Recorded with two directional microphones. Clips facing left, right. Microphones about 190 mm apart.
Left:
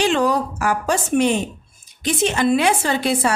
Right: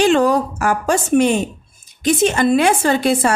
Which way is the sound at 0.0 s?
50° right (ahead or behind).